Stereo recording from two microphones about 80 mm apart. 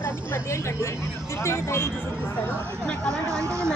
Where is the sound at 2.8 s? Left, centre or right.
Centre.